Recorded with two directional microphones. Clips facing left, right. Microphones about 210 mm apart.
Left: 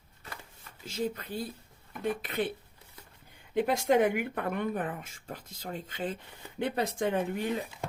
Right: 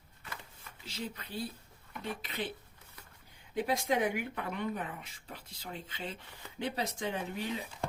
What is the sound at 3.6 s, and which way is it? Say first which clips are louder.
Speech: left 6 dB; 50° left (ahead or behind).